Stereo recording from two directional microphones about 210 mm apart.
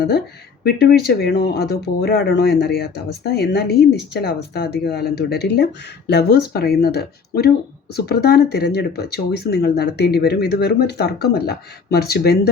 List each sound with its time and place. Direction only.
0.6 s speech: 50° left (ahead or behind)